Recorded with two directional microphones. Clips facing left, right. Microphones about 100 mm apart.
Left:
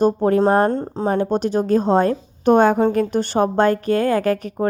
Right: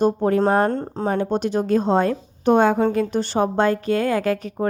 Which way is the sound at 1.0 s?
30° left (ahead or behind).